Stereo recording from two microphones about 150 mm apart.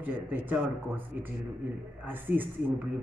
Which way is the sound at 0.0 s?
10° right (ahead or behind).